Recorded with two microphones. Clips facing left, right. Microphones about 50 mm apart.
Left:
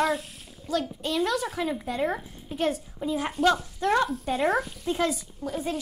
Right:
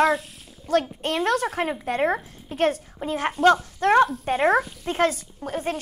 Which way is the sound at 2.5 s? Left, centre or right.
Right.